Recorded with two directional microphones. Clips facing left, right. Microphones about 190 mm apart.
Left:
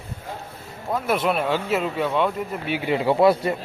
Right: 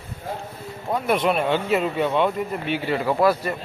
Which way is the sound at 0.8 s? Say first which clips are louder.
Right 1 dB; centre (ahead or behind).